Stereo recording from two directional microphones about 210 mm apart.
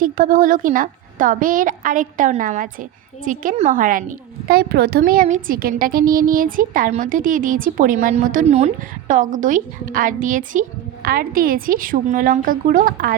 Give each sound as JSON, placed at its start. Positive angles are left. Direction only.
{"t": 0.0, "sound": "a woman's voice", "side_deg": -40}